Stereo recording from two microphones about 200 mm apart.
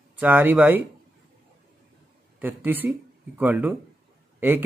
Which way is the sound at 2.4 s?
10° right (ahead or behind).